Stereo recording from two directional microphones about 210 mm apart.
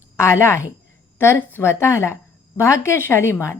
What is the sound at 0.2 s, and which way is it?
A woman's voice, 10° left (ahead or behind).